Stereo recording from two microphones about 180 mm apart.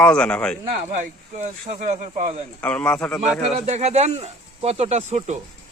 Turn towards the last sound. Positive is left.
turn(degrees=-40)  # may be behind; listen again after turning